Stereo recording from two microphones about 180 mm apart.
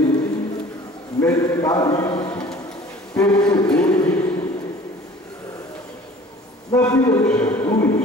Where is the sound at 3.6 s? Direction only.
5° left (ahead or behind).